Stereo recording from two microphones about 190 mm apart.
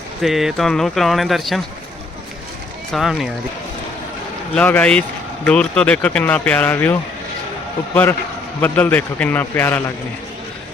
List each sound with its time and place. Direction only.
0.2 s speech: centre (ahead or behind)
2.9 s speech: centre (ahead or behind)
4.5 s speech: 5° left (ahead or behind)
8.6 s speech: 10° left (ahead or behind)